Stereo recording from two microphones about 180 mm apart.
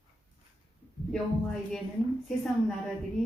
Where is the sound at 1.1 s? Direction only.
5° left (ahead or behind).